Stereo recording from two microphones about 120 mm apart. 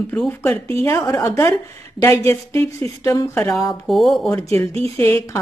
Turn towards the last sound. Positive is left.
turn(degrees=20)  # may be behind; listen again after turning